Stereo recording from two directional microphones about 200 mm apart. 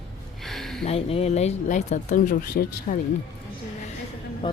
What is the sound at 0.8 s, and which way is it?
Speech, 30° left (ahead or behind).